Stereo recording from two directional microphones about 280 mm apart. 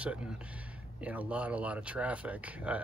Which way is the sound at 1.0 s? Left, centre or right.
Centre.